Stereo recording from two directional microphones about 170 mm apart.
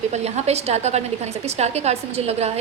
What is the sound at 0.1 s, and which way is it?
A woman's voice, 40° right (ahead or behind).